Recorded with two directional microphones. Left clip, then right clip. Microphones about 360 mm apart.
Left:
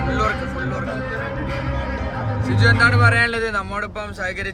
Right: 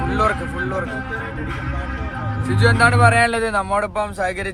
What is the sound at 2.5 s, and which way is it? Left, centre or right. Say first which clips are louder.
Speech: right 1 dB; centre.